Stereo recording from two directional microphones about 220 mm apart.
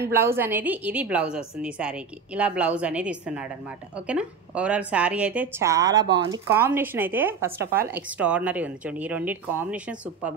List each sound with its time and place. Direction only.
0.0 s a woman's voice: 10° right (ahead or behind)
7.6 s speech: 45° right (ahead or behind)
7.9 s speech: 5° right (ahead or behind)